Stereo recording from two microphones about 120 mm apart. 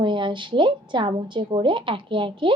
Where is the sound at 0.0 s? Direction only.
40° right (ahead or behind).